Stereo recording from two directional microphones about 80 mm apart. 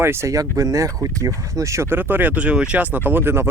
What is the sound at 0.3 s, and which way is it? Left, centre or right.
Speech, right.